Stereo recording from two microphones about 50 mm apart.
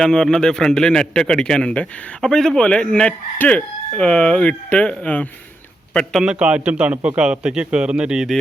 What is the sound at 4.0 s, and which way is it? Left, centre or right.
Speech, left.